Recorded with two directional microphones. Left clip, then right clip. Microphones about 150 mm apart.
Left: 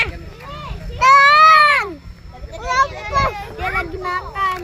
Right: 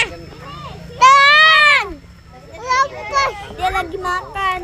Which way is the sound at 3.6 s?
90° right.